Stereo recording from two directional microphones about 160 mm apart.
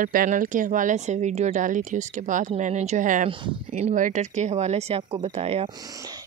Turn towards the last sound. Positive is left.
turn(degrees=-40)  # may be behind; listen again after turning